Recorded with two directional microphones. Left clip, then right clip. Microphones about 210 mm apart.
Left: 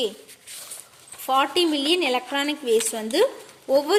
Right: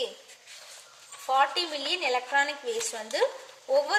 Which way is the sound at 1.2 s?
45° left (ahead or behind).